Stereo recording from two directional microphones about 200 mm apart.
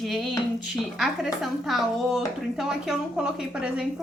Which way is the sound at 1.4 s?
Centre (ahead or behind).